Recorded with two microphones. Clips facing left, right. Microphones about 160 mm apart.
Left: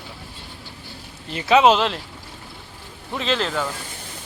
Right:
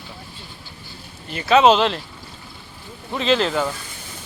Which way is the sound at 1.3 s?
20° left (ahead or behind).